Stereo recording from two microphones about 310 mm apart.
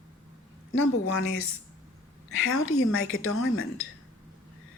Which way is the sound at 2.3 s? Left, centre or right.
Left.